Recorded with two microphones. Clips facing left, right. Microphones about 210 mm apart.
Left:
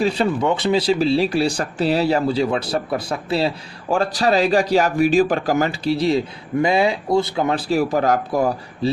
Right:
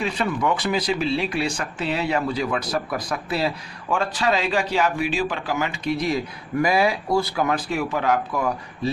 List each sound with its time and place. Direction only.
0.0 s speech: 30° left (ahead or behind)